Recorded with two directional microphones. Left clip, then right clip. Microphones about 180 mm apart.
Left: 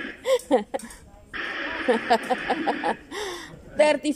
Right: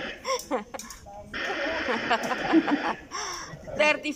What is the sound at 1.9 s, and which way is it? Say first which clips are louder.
Speech: left 8 dB; 30° left (ahead or behind).